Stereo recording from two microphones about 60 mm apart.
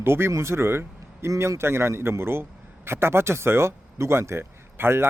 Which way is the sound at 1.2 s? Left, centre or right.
Right.